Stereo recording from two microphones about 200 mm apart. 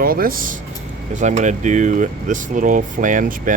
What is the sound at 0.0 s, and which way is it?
Speech, 45° right (ahead or behind).